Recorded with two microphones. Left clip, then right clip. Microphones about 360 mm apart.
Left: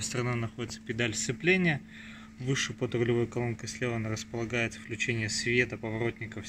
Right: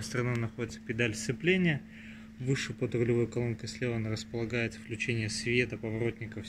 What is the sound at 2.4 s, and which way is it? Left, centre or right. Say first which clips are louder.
Speech: left 2 dB; left.